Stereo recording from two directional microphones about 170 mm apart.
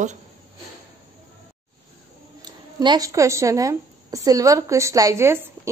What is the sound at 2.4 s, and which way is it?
A woman's voice, 25° right (ahead or behind).